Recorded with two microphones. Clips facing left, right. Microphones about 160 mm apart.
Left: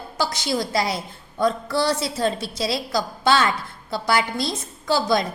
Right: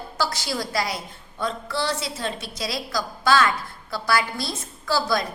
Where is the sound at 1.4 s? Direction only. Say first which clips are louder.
Left 6 dB; 40° left (ahead or behind); by 5.3 s 20° left (ahead or behind).